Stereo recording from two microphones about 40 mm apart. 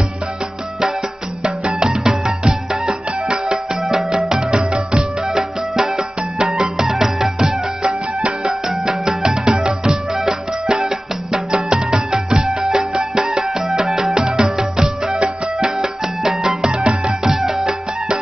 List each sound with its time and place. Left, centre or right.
1.4 s music: centre
16.6 s music: right
17.3 s music: centre